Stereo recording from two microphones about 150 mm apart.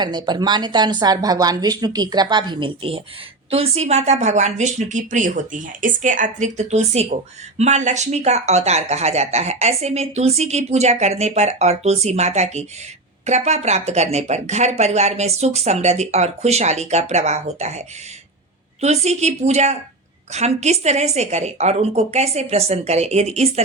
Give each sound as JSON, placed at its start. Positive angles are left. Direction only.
{"t": 0.0, "sound": "a woman's voice", "side_deg": -30}